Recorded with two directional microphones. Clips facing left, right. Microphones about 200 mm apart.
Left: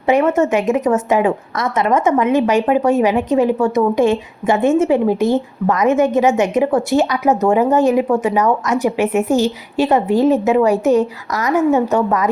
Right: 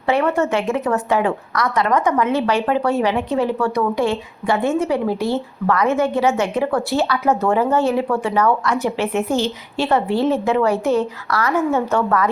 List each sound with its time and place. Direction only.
0.1 s a woman's voice: 15° left (ahead or behind)